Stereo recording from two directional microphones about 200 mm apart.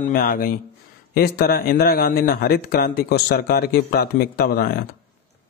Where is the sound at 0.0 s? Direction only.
45° left (ahead or behind).